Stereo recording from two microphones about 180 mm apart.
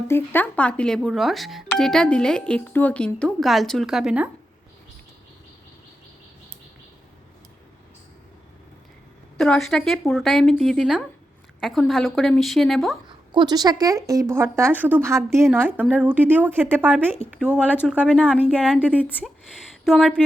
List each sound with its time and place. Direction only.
0.1 s speech: 10° left (ahead or behind); by 4.3 s 5° right (ahead or behind)
9.4 s speech: centre (ahead or behind)
13.3 s a woman's voice: 25° right (ahead or behind); by 18.3 s 5° right (ahead or behind)
18.6 s speech: 5° left (ahead or behind)